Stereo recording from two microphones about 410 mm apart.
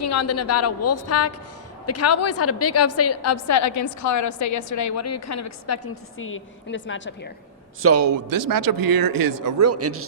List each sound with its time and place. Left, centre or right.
0.0 s a woman's voice: left
7.8 s a man's voice: right